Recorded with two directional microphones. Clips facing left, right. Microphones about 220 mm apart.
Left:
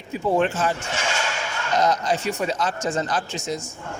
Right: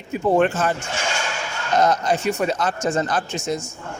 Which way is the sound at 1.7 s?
50° right (ahead or behind).